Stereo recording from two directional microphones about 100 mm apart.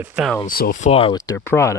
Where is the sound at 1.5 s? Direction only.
25° left (ahead or behind).